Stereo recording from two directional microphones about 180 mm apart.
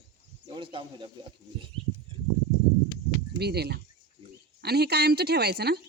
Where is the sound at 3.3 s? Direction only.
65° right (ahead or behind).